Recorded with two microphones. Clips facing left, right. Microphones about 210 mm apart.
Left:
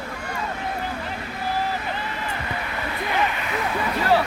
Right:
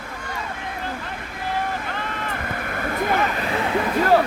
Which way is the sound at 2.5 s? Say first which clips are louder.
Right 3 dB; 50° right (ahead or behind).